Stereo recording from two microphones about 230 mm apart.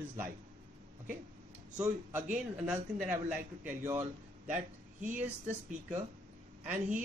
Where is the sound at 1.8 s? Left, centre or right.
Centre.